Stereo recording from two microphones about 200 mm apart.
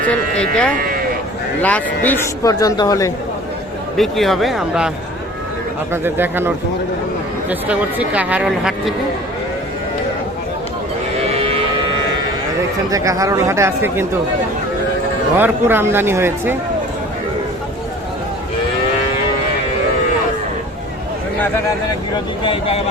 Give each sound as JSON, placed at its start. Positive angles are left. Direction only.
{"t": 0.1, "sound": "speech", "side_deg": 5}
{"t": 3.9, "sound": "speech", "side_deg": 0}
{"t": 5.9, "sound": "speech", "side_deg": -10}
{"t": 7.7, "sound": "speech", "side_deg": -5}
{"t": 11.3, "sound": "a sound", "side_deg": -30}
{"t": 12.9, "sound": "speech", "side_deg": -15}
{"t": 15.4, "sound": "speech", "side_deg": -10}
{"t": 22.4, "sound": "speech", "side_deg": 30}